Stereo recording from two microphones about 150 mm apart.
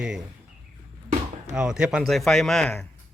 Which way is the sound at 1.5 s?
5° right (ahead or behind).